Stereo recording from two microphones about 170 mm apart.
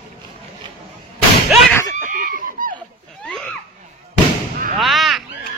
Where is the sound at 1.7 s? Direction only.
15° left (ahead or behind).